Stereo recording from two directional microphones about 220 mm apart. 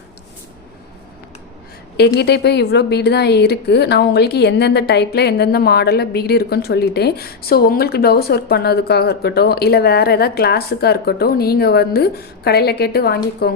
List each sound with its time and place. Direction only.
2.0 s a woman's voice: 50° left (ahead or behind)